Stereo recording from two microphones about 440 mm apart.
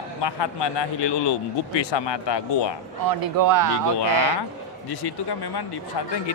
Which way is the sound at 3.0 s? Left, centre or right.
Right.